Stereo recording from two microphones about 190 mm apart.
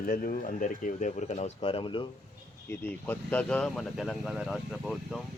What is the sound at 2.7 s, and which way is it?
Speech, 15° left (ahead or behind).